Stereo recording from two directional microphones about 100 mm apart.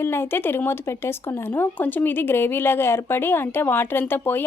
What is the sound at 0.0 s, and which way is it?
Speech, 25° left (ahead or behind).